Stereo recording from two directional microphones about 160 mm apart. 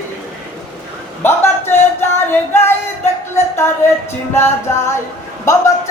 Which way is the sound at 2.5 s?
15° left (ahead or behind).